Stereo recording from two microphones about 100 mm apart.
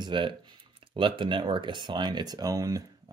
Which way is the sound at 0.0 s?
55° right (ahead or behind).